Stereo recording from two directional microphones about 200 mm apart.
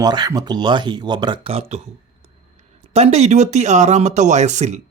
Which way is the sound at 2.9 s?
35° right (ahead or behind).